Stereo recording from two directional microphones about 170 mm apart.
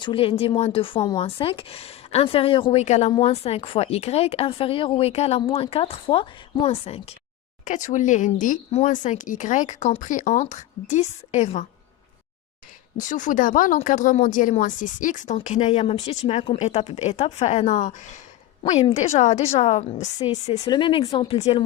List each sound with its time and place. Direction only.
0.0 s speech: 30° left (ahead or behind)
2.8 s speech: 40° left (ahead or behind)
7.6 s speech: 45° left (ahead or behind)
13.0 s speech: 50° left (ahead or behind)